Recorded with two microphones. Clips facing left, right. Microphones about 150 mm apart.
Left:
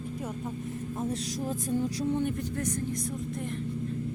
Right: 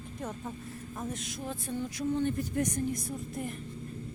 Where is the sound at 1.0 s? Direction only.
35° left (ahead or behind).